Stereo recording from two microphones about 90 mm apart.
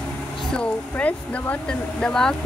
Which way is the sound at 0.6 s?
15° left (ahead or behind).